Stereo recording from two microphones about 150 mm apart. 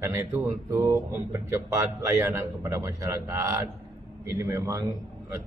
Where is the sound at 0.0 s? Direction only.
20° right (ahead or behind).